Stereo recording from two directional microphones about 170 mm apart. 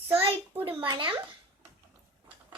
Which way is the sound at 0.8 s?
30° right (ahead or behind).